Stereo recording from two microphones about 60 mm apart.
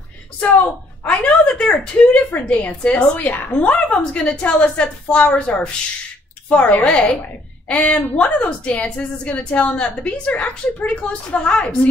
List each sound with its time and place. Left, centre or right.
1.0 s speech: centre
2.3 s a woman's voice: left
2.8 s speech: centre
3.2 s a woman's voice: left